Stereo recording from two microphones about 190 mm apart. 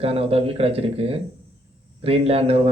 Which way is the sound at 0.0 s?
30° right (ahead or behind).